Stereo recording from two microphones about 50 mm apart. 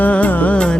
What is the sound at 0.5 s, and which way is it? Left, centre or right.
Music, left.